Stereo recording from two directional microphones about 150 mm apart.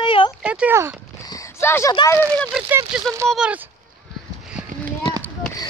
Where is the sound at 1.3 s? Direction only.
20° left (ahead or behind).